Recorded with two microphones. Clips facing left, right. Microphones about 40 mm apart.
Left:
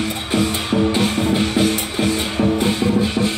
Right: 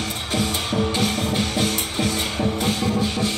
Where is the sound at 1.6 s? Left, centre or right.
Left.